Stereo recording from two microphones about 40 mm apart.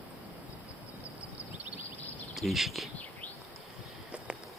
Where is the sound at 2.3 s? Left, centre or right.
Centre.